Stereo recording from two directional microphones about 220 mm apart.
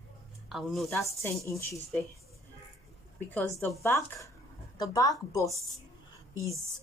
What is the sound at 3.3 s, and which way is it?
Speech, 10° left (ahead or behind).